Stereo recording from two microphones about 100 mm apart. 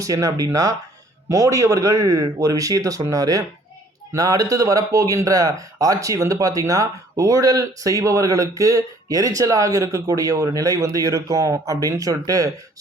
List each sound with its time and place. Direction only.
0.0 s speech: 35° right (ahead or behind)